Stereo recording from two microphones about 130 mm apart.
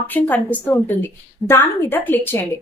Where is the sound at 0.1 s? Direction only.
10° left (ahead or behind).